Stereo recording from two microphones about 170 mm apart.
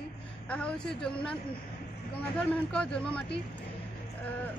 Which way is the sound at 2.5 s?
5° left (ahead or behind).